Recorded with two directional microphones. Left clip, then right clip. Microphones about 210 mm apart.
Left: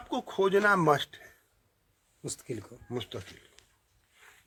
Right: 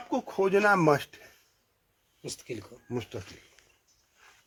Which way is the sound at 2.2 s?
55° left (ahead or behind).